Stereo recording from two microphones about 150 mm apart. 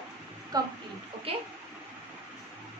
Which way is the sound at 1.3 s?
40° right (ahead or behind).